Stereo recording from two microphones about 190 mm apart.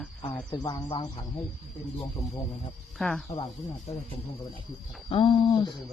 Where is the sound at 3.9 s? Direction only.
30° left (ahead or behind).